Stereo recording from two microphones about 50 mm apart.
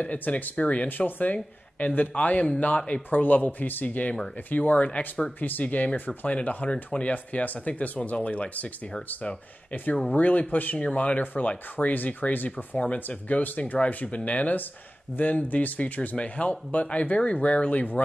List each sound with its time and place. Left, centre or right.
0.0 s speech: left
0.8 s speech: left
10.0 s speech: left
12.7 s speech: left